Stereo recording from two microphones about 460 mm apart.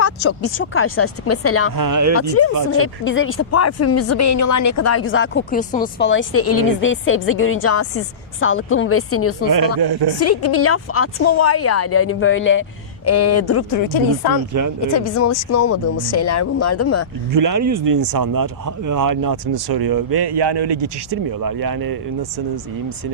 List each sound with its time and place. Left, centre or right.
0.0 s speech: left
1.7 s speech: right
2.7 s speech: left
9.5 s speech: right
10.2 s speech: left
14.5 s speech: right
14.9 s speech: left
17.3 s speech: right
21.4 s speech: right